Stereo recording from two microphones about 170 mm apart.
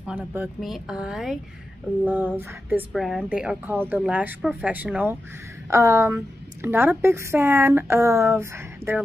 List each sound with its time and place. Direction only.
0.0 s a woman's voice: 10° right (ahead or behind)